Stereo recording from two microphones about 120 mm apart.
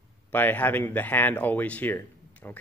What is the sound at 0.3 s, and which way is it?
A man's voice, 15° left (ahead or behind).